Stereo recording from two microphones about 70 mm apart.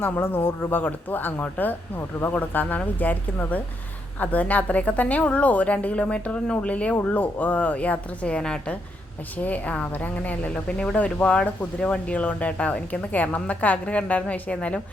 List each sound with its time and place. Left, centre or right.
0.0 s speech: left